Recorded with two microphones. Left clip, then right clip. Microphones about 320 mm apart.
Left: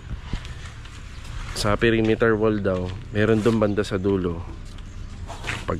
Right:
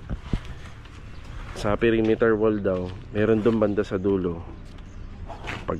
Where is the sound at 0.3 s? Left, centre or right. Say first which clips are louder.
Right 2 dB; centre.